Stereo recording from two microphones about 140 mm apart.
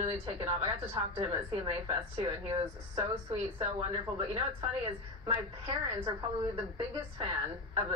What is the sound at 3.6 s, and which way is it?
Speech, 45° right (ahead or behind).